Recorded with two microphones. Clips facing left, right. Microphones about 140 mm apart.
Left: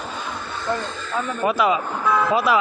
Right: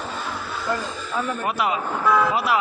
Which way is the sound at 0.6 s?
5° right (ahead or behind).